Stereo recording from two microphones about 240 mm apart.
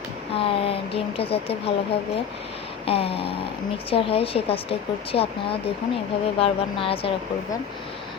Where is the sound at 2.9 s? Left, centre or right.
Left.